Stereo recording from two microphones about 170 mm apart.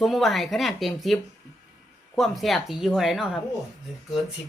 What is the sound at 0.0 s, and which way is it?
Speech, centre (ahead or behind).